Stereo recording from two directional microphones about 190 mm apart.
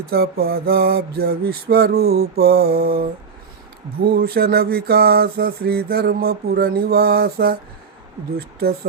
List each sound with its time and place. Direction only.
0.0 s mantra: 55° right (ahead or behind)